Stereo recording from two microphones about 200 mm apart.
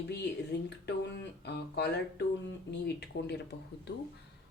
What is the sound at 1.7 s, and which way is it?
Music, 55° left (ahead or behind).